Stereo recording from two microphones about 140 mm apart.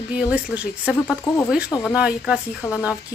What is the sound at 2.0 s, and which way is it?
Speech, 5° right (ahead or behind).